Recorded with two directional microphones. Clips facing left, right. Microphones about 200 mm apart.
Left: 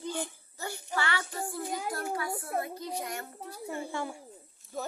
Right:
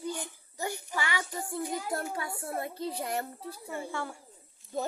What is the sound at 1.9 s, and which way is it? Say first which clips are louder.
A child's voice: left 1 dB; 25° right (ahead or behind).